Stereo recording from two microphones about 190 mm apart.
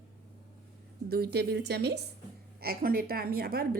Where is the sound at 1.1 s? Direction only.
55° right (ahead or behind).